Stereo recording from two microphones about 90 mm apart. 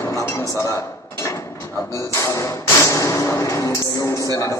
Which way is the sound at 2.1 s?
35° left (ahead or behind).